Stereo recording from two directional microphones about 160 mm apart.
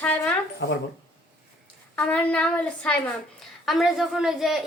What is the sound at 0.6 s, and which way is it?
Speech, 90° left.